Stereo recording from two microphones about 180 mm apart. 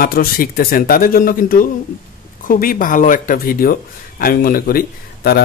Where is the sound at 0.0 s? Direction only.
55° left (ahead or behind).